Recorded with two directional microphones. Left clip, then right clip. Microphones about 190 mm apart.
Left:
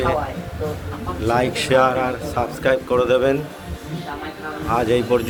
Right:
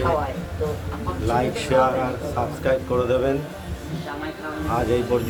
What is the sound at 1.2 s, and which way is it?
A man's voice, 15° left (ahead or behind).